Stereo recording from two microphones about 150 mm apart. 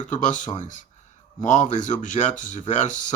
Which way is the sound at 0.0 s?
55° left (ahead or behind).